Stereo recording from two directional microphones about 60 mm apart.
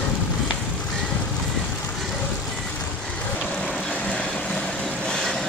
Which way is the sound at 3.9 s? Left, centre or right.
Left.